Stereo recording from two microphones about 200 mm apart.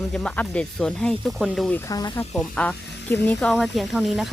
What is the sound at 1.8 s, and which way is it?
Speech, 20° left (ahead or behind).